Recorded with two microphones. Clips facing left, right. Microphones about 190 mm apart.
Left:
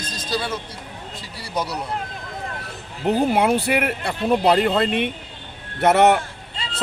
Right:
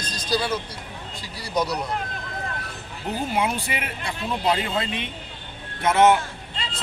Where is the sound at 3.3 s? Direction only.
65° left (ahead or behind).